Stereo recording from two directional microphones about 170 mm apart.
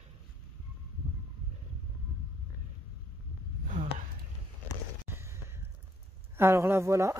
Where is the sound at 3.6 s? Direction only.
45° right (ahead or behind).